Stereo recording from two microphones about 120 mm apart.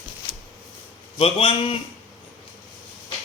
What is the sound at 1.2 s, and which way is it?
Speech, 50° left (ahead or behind).